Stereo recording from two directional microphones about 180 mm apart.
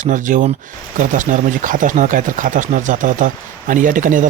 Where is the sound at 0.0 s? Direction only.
45° right (ahead or behind).